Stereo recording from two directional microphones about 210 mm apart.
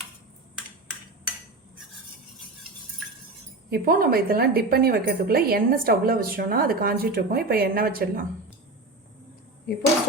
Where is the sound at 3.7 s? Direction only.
45° right (ahead or behind).